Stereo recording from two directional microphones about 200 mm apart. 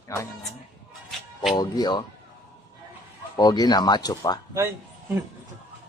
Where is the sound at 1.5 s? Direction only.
20° left (ahead or behind).